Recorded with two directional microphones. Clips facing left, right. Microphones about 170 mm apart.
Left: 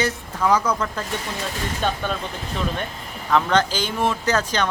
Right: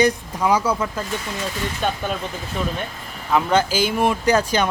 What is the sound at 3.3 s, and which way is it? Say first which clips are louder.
Speech: right 1 dB; 10° right (ahead or behind).